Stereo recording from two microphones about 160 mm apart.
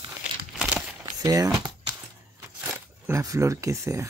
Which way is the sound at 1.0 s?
20° right (ahead or behind).